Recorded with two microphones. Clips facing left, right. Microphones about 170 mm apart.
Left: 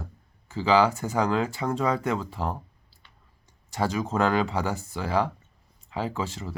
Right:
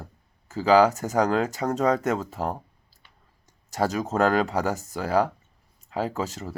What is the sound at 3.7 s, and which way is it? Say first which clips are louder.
Speech: right 2 dB; 40° right (ahead or behind).